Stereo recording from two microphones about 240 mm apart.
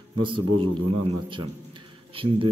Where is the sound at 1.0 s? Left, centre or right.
Right.